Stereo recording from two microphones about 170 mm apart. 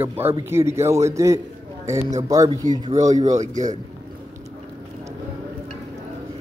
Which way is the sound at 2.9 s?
45° right (ahead or behind).